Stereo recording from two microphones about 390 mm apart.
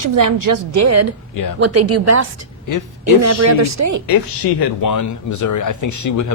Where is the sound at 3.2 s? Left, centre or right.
Right.